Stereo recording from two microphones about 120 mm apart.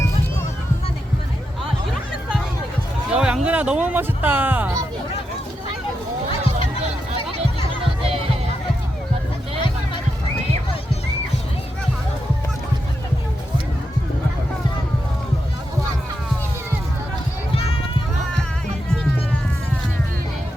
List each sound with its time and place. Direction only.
3.1 s speech: 5° right (ahead or behind)
7.8 s music: 50° right (ahead or behind)
17.5 s children playing: 50° left (ahead or behind)